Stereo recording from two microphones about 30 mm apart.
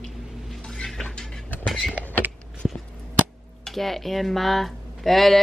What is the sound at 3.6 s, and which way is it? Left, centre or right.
Speech, centre.